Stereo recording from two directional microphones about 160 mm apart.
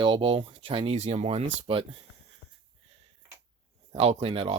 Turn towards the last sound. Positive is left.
turn(degrees=-35)  # may be behind; listen again after turning